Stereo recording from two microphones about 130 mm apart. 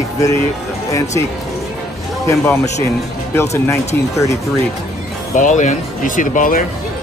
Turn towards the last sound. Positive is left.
turn(degrees=90)